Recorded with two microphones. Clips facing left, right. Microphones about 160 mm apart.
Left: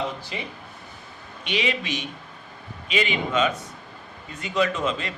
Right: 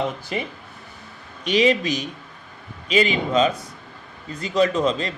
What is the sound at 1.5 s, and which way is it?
Speech, 40° right (ahead or behind).